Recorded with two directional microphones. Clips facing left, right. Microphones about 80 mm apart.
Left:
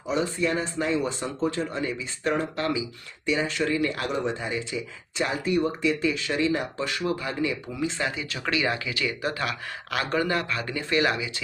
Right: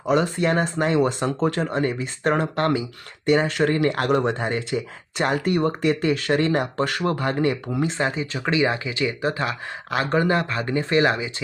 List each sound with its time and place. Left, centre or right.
0.0 s speech: right